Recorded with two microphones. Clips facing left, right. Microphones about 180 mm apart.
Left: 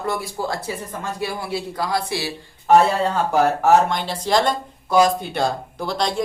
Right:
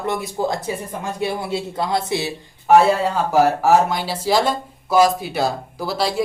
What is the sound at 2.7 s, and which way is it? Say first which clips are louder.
Speech: right 1 dB; 5° right (ahead or behind).